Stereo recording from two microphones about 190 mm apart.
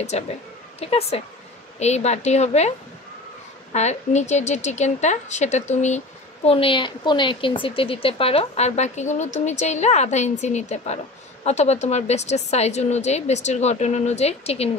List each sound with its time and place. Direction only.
0.1 s speech: 35° left (ahead or behind)
3.7 s speech: 35° left (ahead or behind)